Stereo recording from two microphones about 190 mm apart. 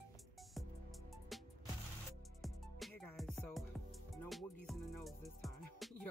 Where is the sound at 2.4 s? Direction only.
Centre (ahead or behind).